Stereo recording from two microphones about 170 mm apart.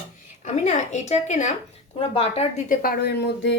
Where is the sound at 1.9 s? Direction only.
35° left (ahead or behind); by 3.6 s 90° left.